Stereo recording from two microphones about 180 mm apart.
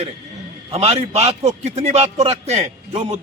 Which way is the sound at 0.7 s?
35° right (ahead or behind).